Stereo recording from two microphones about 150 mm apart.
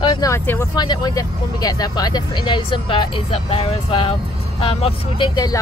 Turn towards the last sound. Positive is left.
turn(degrees=25)  # may be behind; listen again after turning